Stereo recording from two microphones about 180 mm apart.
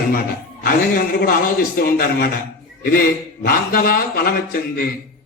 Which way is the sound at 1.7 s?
55° left (ahead or behind).